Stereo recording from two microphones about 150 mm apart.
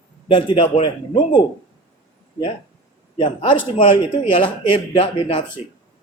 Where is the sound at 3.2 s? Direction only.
35° left (ahead or behind).